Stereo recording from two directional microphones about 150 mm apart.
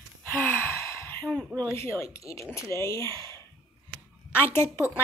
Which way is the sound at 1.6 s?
20° left (ahead or behind).